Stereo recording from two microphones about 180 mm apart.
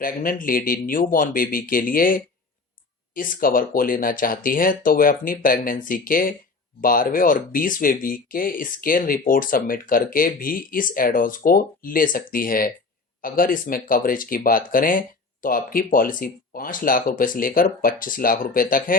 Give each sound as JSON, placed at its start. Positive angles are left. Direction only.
{"t": 0.0, "sound": "speech", "side_deg": 50}